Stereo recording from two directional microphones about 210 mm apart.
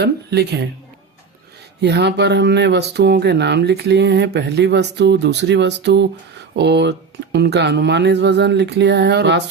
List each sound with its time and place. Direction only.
0.0 s speech: 50° right (ahead or behind)
1.8 s speech: 55° right (ahead or behind)